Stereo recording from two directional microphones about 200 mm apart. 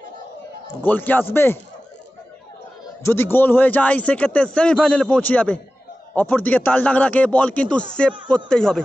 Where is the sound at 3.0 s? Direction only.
10° left (ahead or behind).